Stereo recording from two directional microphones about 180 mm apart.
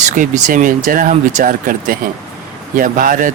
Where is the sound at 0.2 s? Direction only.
50° right (ahead or behind).